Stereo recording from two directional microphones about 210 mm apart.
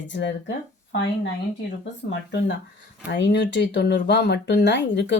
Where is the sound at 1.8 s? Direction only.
55° left (ahead or behind).